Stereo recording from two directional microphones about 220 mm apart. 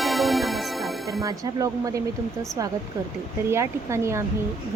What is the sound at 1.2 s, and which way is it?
Speech, 15° right (ahead or behind).